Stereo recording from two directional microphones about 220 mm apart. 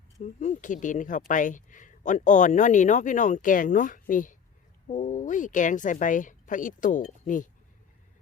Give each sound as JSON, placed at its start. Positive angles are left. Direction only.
{"t": 0.2, "sound": "speech", "side_deg": 30}